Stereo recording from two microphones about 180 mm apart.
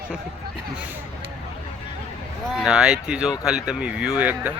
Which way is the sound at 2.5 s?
5° right (ahead or behind).